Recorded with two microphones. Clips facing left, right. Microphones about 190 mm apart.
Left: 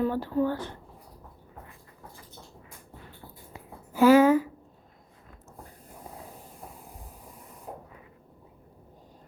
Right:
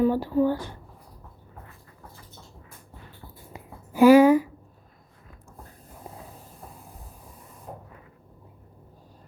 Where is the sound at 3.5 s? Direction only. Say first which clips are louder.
Right 4 dB; 15° right (ahead or behind).